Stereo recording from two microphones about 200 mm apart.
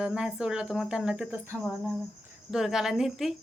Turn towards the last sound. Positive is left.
turn(degrees=0)  # may be behind; listen again after turning